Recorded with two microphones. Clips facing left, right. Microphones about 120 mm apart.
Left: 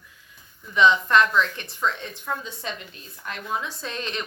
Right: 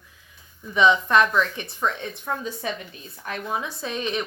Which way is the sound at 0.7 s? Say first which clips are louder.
Even; 15° right (ahead or behind).